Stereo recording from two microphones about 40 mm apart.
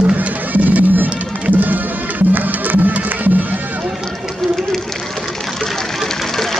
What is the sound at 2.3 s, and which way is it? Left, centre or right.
Music, right.